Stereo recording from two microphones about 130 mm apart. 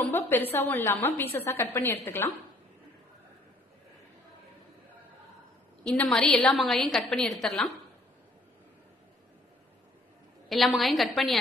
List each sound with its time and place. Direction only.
0.0 s a woman's voice: 15° left (ahead or behind)
5.9 s a woman's voice: 5° left (ahead or behind)
10.8 s a woman's voice: centre (ahead or behind)